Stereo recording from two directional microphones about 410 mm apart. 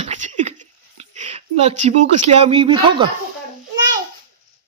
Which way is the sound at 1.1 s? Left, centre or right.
Centre.